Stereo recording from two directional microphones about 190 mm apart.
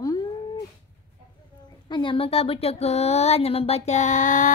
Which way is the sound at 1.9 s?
25° left (ahead or behind).